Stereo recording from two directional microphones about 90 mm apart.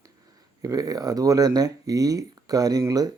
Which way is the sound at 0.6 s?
40° right (ahead or behind).